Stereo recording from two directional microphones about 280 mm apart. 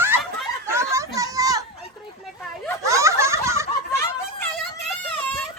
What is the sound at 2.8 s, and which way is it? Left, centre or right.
Giggle, centre.